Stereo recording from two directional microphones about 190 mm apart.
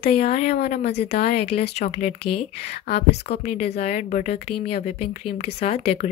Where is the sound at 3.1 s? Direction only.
60° left (ahead or behind).